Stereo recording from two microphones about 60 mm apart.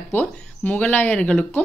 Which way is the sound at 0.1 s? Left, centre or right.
Left.